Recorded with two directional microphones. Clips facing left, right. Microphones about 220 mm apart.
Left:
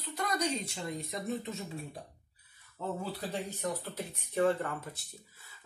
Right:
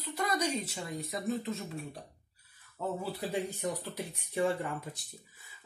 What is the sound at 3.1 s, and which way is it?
Speech, 10° right (ahead or behind).